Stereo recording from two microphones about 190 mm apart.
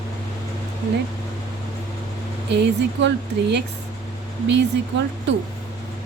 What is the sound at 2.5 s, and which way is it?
Speech, 65° right (ahead or behind).